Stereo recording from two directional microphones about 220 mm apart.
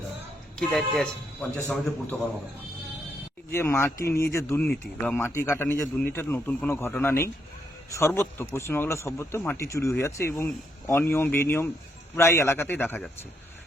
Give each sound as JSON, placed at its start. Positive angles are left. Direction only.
{"t": 0.6, "sound": "a man's voice", "side_deg": 0}
{"t": 3.5, "sound": "speech", "side_deg": 10}
{"t": 3.9, "sound": "speech", "side_deg": 45}
{"t": 4.3, "sound": "speech", "side_deg": 10}